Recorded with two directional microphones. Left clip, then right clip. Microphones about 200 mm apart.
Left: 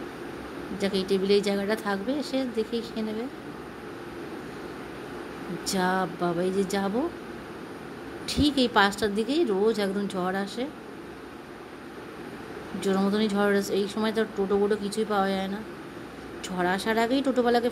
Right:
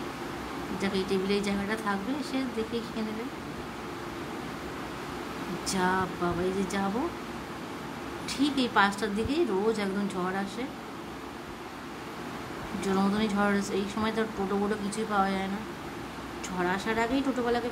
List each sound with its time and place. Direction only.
0.7 s a woman's voice: 20° left (ahead or behind)
5.7 s a woman's voice: 20° left (ahead or behind)
8.3 s a woman's voice: 25° left (ahead or behind)
12.8 s a woman's voice: 20° left (ahead or behind)
16.4 s a woman's voice: 25° left (ahead or behind)